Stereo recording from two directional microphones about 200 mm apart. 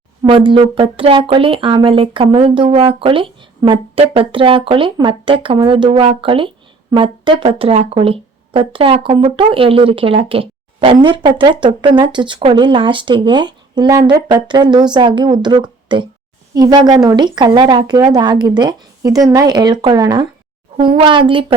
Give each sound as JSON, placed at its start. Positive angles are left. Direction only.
{"t": 0.2, "sound": "speech", "side_deg": -25}